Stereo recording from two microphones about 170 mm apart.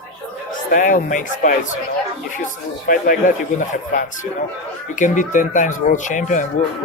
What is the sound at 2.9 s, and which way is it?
Speech, 50° left (ahead or behind).